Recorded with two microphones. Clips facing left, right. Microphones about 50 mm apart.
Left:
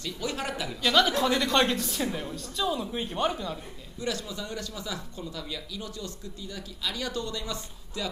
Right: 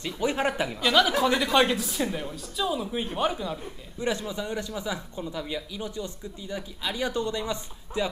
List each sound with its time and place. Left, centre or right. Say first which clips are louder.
0.0 s speech: right 6 dB; right
0.8 s a man's voice: right 1 dB; centre
4.0 s speech: right 4 dB; right